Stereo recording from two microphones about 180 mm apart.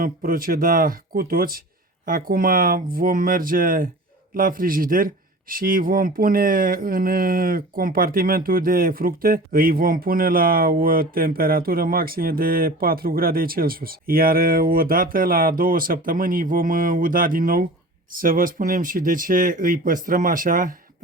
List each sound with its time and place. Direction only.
0.0 s speech: 55° right (ahead or behind)